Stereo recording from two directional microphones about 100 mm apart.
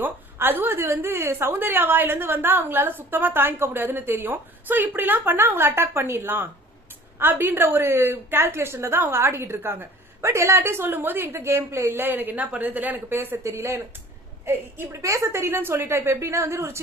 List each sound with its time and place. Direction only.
0.0 s a woman's voice: 20° right (ahead or behind)